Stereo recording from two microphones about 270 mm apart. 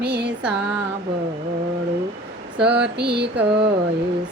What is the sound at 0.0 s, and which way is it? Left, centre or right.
Music, right.